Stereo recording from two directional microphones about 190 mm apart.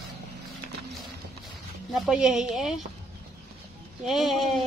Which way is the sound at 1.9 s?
Centre (ahead or behind).